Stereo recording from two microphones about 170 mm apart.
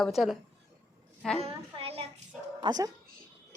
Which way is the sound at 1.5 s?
35° right (ahead or behind).